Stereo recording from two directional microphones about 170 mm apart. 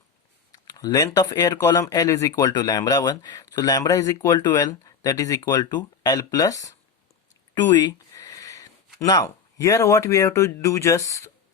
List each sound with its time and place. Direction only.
0.5 s speech: 25° left (ahead or behind)
7.7 s a sound: 20° left (ahead or behind)
9.0 s speech: 20° left (ahead or behind)